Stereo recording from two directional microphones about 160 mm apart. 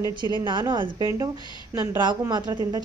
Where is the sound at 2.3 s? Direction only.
25° right (ahead or behind).